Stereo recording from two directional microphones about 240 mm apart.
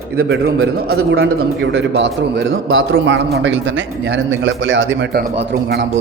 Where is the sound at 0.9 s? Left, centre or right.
Right.